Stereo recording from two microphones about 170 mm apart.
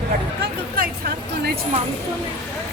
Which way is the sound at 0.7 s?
60° right (ahead or behind).